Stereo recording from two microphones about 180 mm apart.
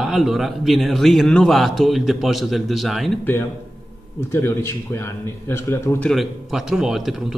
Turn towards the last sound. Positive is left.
turn(degrees=0)  # may be behind; listen again after turning